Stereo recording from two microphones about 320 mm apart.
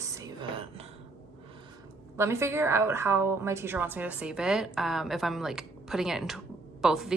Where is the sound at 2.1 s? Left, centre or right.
Centre.